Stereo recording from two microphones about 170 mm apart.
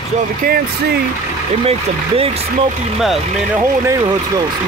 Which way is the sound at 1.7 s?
35° right (ahead or behind).